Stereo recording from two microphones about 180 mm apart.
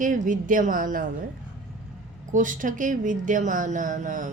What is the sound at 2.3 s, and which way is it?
A woman's voice, 45° right (ahead or behind).